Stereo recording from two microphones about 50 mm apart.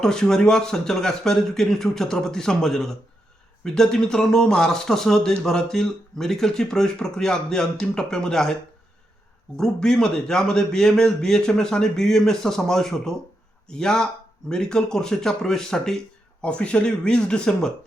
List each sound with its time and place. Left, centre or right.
0.0 s a man's voice: centre
9.6 s a man's voice: centre
16.4 s speech: left